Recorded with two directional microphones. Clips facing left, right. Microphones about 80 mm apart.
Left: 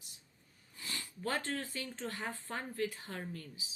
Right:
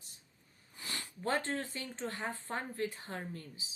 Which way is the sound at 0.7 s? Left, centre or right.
Right.